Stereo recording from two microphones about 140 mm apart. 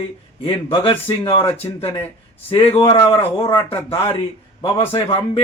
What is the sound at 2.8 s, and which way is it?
Speech, 25° left (ahead or behind).